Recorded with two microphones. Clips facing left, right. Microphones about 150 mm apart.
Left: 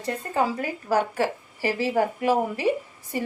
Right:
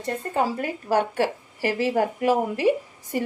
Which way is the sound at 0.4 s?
30° right (ahead or behind).